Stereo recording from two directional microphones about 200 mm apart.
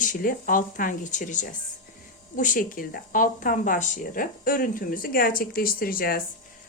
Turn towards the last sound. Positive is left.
turn(degrees=45)  # may be behind; listen again after turning